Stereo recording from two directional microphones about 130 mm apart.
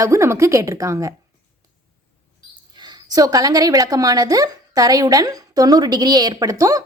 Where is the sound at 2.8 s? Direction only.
35° right (ahead or behind).